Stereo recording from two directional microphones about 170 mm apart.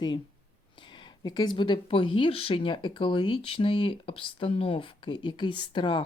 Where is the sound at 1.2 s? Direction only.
25° left (ahead or behind).